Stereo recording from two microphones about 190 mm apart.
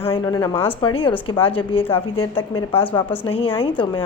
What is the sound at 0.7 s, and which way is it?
A woman's voice, 25° left (ahead or behind).